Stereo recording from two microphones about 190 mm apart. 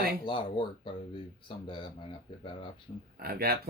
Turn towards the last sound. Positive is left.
turn(degrees=-55)  # may be behind; listen again after turning